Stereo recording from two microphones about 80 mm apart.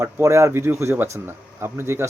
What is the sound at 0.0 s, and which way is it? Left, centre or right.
Speech, right.